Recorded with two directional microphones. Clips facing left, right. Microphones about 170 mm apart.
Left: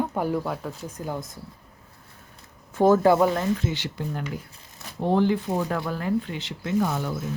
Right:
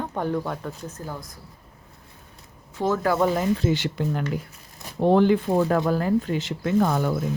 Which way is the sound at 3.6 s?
45° right (ahead or behind).